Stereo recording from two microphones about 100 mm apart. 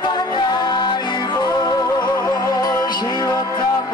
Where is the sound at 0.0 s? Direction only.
45° left (ahead or behind).